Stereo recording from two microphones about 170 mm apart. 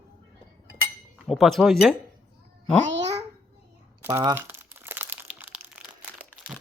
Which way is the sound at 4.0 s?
15° right (ahead or behind).